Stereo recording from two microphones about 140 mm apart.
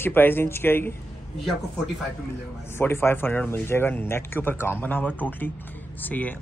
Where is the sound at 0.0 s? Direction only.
15° left (ahead or behind).